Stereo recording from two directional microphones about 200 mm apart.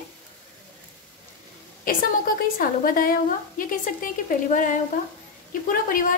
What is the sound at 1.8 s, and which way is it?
A woman's voice, 45° left (ahead or behind).